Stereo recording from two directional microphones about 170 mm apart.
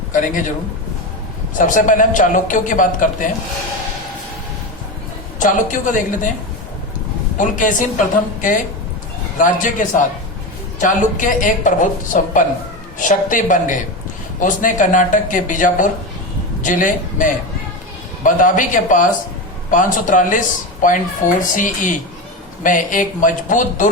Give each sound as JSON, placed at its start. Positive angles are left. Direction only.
{"t": 0.1, "sound": "a woman's voice", "side_deg": 50}
{"t": 1.5, "sound": "a woman's voice", "side_deg": 50}
{"t": 5.4, "sound": "a woman's voice", "side_deg": 50}
{"t": 7.3, "sound": "a woman's voice", "side_deg": 50}